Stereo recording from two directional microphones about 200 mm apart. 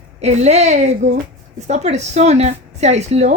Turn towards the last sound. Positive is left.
turn(degrees=-35)  # may be behind; listen again after turning